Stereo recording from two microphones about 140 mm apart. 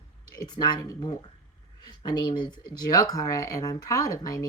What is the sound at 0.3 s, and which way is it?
Speech, 30° left (ahead or behind).